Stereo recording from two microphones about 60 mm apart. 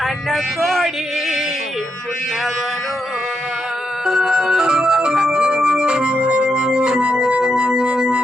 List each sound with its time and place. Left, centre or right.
0.0 s speech: centre
4.0 s music: centre
4.6 s organ: centre
6.2 s music: centre